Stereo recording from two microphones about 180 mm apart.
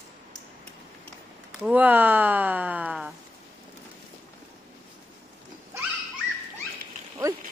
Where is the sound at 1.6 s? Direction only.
10° right (ahead or behind).